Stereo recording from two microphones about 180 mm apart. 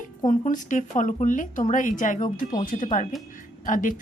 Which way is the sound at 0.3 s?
45° left (ahead or behind).